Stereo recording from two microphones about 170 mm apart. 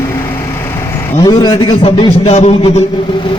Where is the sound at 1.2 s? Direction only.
25° left (ahead or behind).